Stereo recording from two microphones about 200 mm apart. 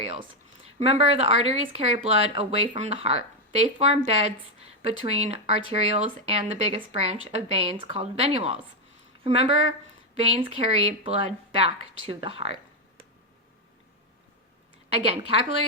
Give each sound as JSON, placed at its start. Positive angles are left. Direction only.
{"t": 0.0, "sound": "a woman's voice", "side_deg": -30}